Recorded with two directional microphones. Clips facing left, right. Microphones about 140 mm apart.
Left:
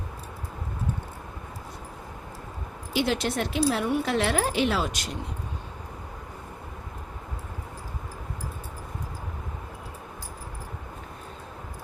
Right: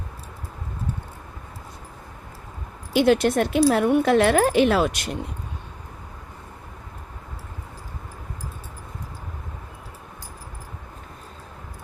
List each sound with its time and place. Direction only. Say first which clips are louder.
2.9 s speech: right 8 dB; 55° right (ahead or behind)